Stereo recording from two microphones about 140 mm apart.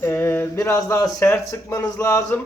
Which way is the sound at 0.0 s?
20° left (ahead or behind).